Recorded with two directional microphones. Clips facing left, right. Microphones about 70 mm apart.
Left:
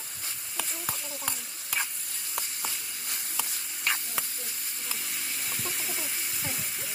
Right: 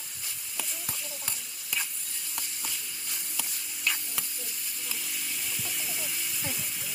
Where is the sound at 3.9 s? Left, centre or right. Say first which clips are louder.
Left 2 dB; left.